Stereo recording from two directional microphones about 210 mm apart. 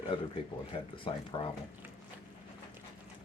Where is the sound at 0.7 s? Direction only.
25° left (ahead or behind).